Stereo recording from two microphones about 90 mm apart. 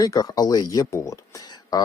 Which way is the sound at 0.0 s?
45° left (ahead or behind).